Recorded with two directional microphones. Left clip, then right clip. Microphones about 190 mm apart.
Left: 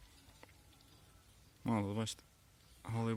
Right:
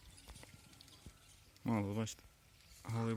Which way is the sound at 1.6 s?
5° left (ahead or behind).